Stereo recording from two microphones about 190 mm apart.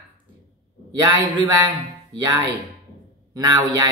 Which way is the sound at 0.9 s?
20° right (ahead or behind).